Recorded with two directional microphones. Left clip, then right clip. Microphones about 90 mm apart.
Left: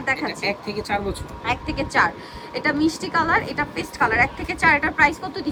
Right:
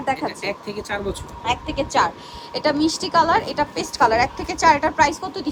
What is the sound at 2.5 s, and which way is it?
Speech, 65° right (ahead or behind).